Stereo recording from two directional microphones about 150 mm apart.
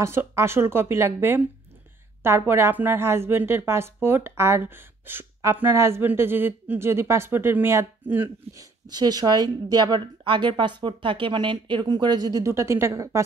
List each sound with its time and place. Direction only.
0.0 s a woman's voice: 15° right (ahead or behind)
8.8 s a woman's voice: 25° right (ahead or behind)